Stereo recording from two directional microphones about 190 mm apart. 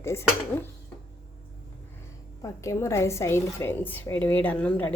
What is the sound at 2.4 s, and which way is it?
A woman's voice, 15° left (ahead or behind).